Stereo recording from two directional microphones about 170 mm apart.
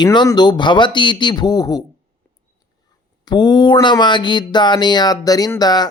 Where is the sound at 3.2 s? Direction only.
25° left (ahead or behind).